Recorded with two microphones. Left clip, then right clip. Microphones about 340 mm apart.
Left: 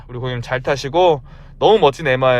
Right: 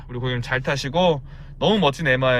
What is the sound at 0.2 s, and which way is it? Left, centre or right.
Speech, centre.